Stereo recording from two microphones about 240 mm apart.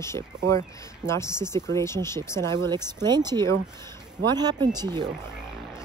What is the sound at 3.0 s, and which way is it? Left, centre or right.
Speech, centre.